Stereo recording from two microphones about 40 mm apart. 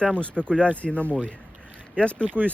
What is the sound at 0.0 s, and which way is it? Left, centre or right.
Speech, left.